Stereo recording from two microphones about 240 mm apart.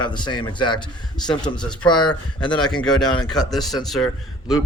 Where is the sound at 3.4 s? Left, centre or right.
Centre.